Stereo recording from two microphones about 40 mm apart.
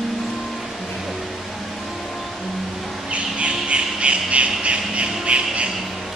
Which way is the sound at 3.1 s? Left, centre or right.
Right.